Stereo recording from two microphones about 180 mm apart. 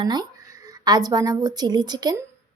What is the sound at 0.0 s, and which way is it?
Speech, 25° right (ahead or behind).